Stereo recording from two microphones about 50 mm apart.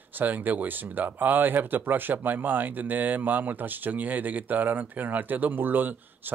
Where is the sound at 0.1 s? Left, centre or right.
Right.